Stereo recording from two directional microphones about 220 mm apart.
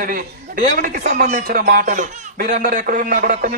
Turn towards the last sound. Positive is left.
turn(degrees=-40)  # may be behind; listen again after turning